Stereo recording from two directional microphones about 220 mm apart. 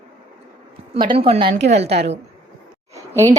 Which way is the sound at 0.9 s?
25° right (ahead or behind).